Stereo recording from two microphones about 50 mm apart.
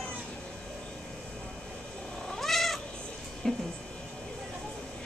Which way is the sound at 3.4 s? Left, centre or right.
Centre.